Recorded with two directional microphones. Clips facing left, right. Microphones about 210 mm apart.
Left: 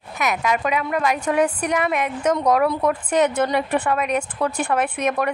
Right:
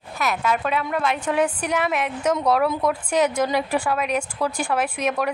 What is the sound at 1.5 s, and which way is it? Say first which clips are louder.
A woman's voice: left 2 dB; 5° right (ahead or behind).